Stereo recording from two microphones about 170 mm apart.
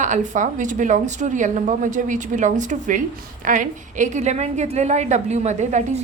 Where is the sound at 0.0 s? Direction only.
45° right (ahead or behind).